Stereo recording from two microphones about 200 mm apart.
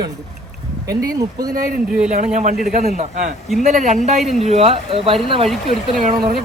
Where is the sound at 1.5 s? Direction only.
45° right (ahead or behind).